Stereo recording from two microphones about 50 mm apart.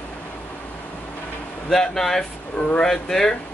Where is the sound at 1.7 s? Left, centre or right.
Centre.